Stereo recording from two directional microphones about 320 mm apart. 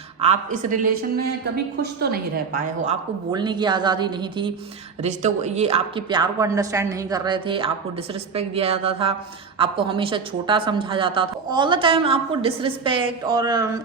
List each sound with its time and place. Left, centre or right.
0.2 s a woman's voice: right